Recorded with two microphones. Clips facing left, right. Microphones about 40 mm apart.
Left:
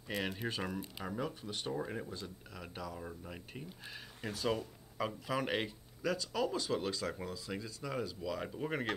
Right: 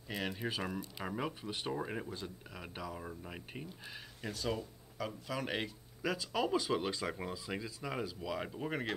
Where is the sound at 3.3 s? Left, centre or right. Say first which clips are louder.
Right 1 dB; centre.